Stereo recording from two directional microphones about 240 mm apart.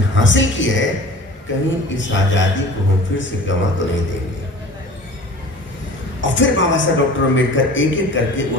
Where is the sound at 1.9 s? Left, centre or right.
Left.